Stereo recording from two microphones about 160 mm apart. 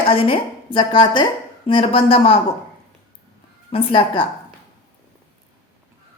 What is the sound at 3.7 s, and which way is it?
Speech, 35° left (ahead or behind).